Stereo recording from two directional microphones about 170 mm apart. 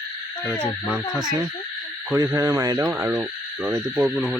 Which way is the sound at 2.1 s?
15° right (ahead or behind).